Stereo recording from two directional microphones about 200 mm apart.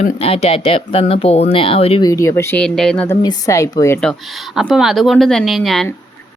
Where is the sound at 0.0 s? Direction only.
30° left (ahead or behind).